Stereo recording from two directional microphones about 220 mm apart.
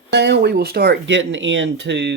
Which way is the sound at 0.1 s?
50° right (ahead or behind).